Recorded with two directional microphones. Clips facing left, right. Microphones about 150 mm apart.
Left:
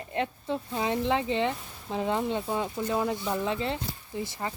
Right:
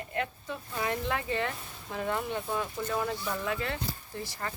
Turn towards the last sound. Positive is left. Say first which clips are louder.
# left 4 dB
turn(degrees=15)  # may be behind; listen again after turning